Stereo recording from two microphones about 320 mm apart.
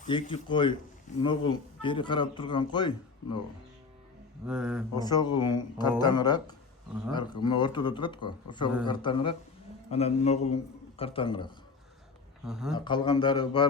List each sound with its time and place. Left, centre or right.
0.1 s speech: centre
4.4 s speech: centre
4.9 s speech: centre
12.5 s speech: centre
12.7 s speech: centre